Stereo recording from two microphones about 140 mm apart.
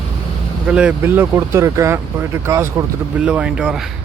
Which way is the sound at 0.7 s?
5° right (ahead or behind).